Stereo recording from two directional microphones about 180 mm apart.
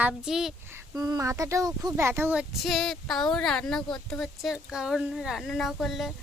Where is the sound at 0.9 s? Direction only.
20° right (ahead or behind).